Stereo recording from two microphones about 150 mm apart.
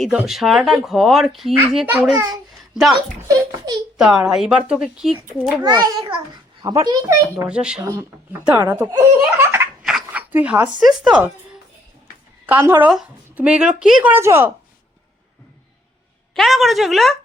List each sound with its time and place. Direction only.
0.0 s speech: centre (ahead or behind)
3.2 s a child's voice: 25° right (ahead or behind)
3.9 s speech: 5° right (ahead or behind)
5.6 s a child's voice: 30° right (ahead or behind)
7.4 s speech: 5° right (ahead or behind)
7.9 s speech: 15° right (ahead or behind)
9.8 s a sound: 5° right (ahead or behind)
10.8 s speech: 5° right (ahead or behind)
12.5 s speech: 15° right (ahead or behind)
16.3 s speech: centre (ahead or behind)